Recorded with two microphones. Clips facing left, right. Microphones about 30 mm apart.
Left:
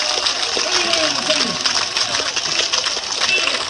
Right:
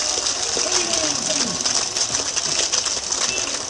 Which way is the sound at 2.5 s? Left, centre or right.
Left.